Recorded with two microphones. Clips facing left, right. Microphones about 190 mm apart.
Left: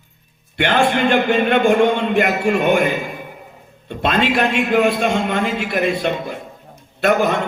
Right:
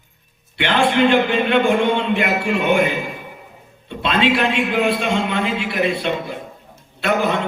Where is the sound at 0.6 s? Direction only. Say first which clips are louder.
Even; 45° left (ahead or behind).